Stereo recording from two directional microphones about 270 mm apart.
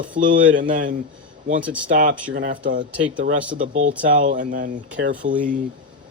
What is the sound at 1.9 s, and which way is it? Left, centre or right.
Speech, right.